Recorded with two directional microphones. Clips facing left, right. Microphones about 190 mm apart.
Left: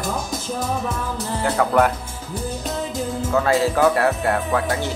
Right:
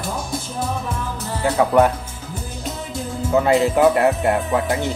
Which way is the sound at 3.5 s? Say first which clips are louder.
Right 2 dB; 20° right (ahead or behind).